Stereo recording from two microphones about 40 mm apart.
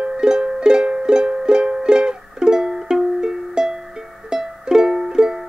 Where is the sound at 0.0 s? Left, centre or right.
Centre.